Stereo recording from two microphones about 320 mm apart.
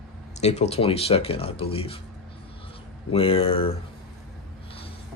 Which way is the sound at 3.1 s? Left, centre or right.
Centre.